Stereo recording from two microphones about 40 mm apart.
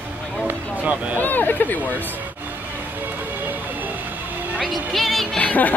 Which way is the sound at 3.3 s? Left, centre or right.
Right.